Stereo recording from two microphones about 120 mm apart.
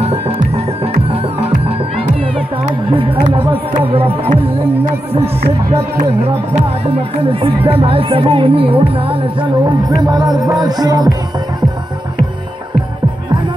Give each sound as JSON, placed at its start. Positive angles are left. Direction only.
{"t": 0.0, "sound": "music", "side_deg": -60}
{"t": 2.7, "sound": "speech", "side_deg": -45}
{"t": 5.1, "sound": "speech", "side_deg": -55}
{"t": 7.2, "sound": "speech", "side_deg": -50}